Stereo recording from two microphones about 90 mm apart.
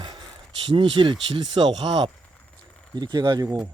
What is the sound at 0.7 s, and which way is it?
Speech, 70° right (ahead or behind).